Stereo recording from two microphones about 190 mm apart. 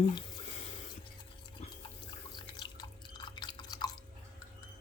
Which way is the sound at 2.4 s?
25° left (ahead or behind).